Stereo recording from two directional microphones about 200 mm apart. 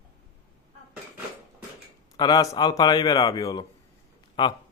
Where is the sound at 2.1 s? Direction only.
20° left (ahead or behind).